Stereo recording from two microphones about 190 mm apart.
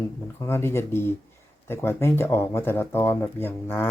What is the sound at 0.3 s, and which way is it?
Speech, 15° left (ahead or behind).